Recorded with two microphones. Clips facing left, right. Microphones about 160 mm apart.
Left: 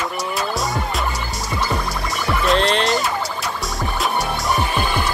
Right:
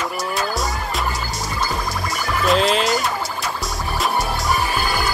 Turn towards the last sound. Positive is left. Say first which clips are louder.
# left 1 dB
turn(degrees=-5)  # may be behind; listen again after turning